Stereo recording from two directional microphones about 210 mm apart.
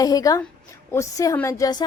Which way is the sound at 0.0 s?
15° left (ahead or behind).